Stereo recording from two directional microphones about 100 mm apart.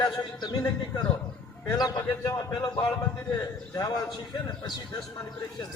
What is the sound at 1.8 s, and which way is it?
A man's voice, 45° left (ahead or behind).